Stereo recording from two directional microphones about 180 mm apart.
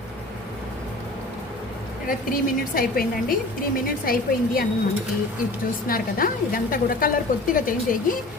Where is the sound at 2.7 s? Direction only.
55° left (ahead or behind).